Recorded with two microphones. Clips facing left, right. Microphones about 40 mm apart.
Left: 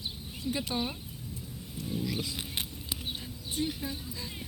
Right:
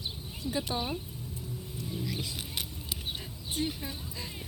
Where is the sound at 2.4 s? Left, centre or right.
Left.